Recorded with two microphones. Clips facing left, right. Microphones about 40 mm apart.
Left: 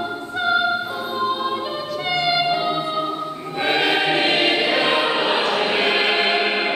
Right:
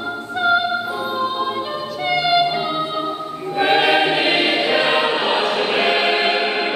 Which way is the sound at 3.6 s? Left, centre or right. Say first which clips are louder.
Right 4 dB; centre.